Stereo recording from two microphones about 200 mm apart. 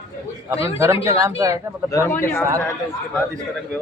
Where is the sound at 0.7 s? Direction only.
15° right (ahead or behind).